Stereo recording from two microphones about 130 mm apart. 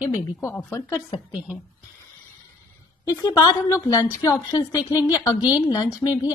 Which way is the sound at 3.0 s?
30° left (ahead or behind).